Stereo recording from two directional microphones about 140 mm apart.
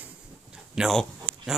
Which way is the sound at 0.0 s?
5° right (ahead or behind).